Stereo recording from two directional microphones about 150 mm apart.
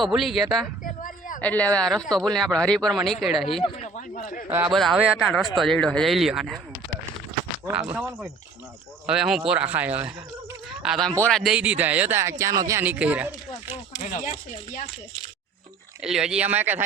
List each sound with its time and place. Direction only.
0.0 s speech: centre (ahead or behind)
0.9 s a sound: 65° left (ahead or behind)
1.4 s speech: 10° left (ahead or behind)
3.8 s a sound: 60° left (ahead or behind)
4.4 s speech: 10° right (ahead or behind)
4.7 s speech: centre (ahead or behind)
7.7 s speech: 5° right (ahead or behind)
10.7 s a sound: centre (ahead or behind)
11.1 s speech: 5° left (ahead or behind); by 12.8 s 20° right (ahead or behind)
12.8 s speech: 10° right (ahead or behind)
14.0 s speech: 55° left (ahead or behind)
16.0 s speech: 5° right (ahead or behind)